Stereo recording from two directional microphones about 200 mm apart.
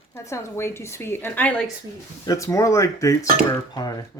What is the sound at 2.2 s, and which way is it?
Speech, 15° left (ahead or behind).